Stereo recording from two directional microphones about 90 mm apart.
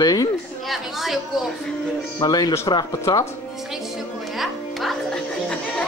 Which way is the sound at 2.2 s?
50° left (ahead or behind).